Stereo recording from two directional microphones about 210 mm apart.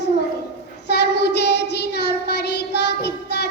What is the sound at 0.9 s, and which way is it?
Child singing, 50° left (ahead or behind).